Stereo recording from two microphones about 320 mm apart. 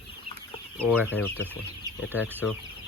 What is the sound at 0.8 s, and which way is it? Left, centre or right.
Speech, centre.